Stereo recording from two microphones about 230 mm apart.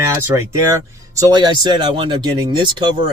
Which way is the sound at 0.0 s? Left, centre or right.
Centre.